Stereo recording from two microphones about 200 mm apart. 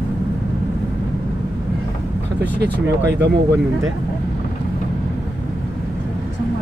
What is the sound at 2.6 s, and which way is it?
Speech, 55° right (ahead or behind).